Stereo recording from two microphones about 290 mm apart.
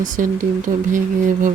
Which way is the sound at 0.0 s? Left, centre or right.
Right.